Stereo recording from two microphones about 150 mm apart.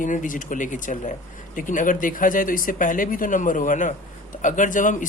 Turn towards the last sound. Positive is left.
turn(degrees=60)  # may be behind; listen again after turning